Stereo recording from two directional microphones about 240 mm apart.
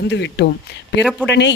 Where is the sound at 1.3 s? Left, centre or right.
Left.